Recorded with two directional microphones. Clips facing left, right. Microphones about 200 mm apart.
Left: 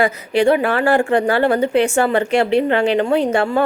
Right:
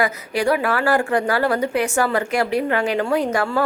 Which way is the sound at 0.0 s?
25° left (ahead or behind).